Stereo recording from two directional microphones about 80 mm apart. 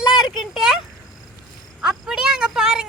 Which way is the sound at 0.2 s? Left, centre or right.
Centre.